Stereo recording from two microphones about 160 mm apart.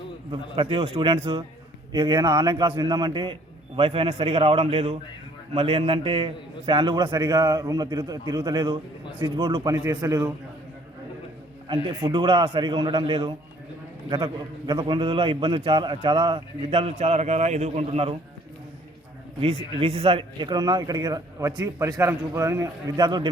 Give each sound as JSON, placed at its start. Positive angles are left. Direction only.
{"t": 0.3, "sound": "a man's voice", "side_deg": -30}
{"t": 12.0, "sound": "a man's voice", "side_deg": -30}
{"t": 14.7, "sound": "a man's voice", "side_deg": -30}
{"t": 19.4, "sound": "a man's voice", "side_deg": -40}